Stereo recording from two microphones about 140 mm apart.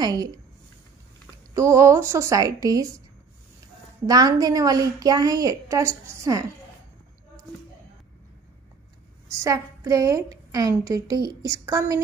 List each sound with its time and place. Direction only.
0.0 s a woman's voice: 25° right (ahead or behind)
1.5 s a woman's voice: 20° right (ahead or behind)
4.0 s a woman's voice: 30° right (ahead or behind)
9.3 s a woman's voice: 20° right (ahead or behind)